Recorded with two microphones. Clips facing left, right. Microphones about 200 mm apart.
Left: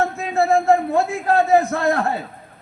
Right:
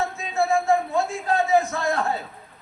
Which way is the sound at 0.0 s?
60° left (ahead or behind).